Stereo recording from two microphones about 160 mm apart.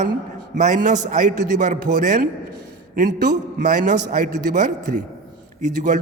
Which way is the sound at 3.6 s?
50° right (ahead or behind).